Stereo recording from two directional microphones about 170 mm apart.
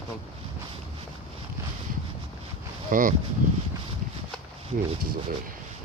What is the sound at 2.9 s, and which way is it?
Speech, 50° right (ahead or behind).